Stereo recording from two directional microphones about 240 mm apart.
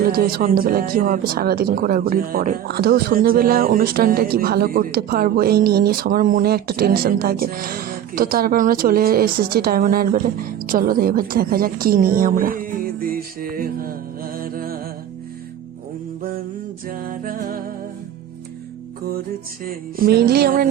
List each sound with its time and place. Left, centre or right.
0.0 s speech: right
14.3 s music: right
16.9 s speech: right
19.6 s speech: right